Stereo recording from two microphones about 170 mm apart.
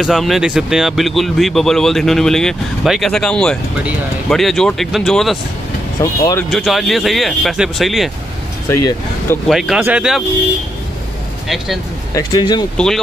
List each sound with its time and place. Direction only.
0.0 s speech: centre (ahead or behind)
5.9 s speech: 20° left (ahead or behind)
6.5 s speech: centre (ahead or behind)
8.6 s speech: 15° left (ahead or behind)
9.5 s speech: centre (ahead or behind)
11.4 s speech: centre (ahead or behind)
12.1 s speech: 25° left (ahead or behind)
12.7 s speech: 5° left (ahead or behind)